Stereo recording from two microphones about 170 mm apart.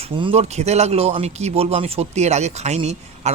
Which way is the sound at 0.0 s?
35° right (ahead or behind).